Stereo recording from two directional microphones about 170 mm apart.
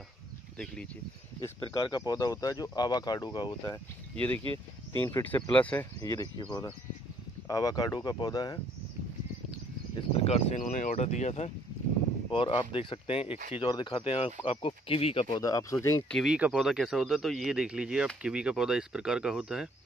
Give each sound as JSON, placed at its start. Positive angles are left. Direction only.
{"t": 1.7, "sound": "speech", "side_deg": 25}
{"t": 5.0, "sound": "speech", "side_deg": 10}
{"t": 5.9, "sound": "speech", "side_deg": 20}
{"t": 9.9, "sound": "speech", "side_deg": 35}
{"t": 12.3, "sound": "speech", "side_deg": 30}
{"t": 16.1, "sound": "speech", "side_deg": 0}